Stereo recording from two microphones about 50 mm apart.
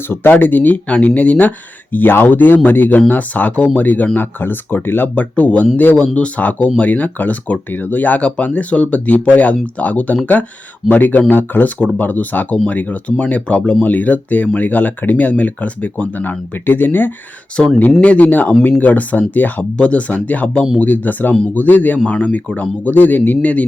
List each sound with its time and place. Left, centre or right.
0.1 s speech: left
18.0 s speech: left
19.7 s speech: left